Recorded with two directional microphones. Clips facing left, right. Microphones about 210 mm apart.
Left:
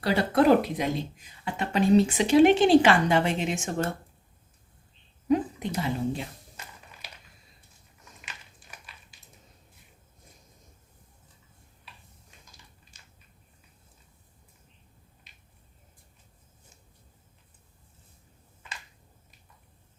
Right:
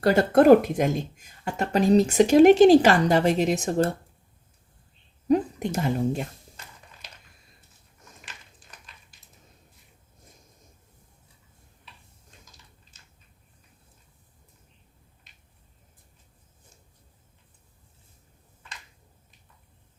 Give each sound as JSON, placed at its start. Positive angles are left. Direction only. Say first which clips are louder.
{"t": 0.0, "sound": "speech", "louder": "right 5 dB", "side_deg": -45}
{"t": 5.3, "sound": "speech", "louder": "right 3 dB", "side_deg": -45}
{"t": 8.7, "sound": "a sound", "louder": "left 2 dB", "side_deg": 10}